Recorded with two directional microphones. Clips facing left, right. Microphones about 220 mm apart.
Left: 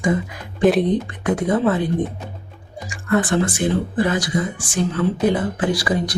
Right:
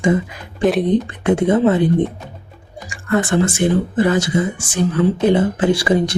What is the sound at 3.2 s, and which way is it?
Speech, 25° right (ahead or behind).